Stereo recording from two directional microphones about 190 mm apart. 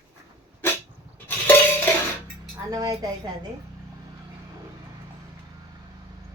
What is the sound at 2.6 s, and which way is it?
Speech, 20° right (ahead or behind).